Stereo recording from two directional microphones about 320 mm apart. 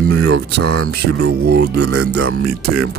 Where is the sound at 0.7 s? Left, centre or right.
Right.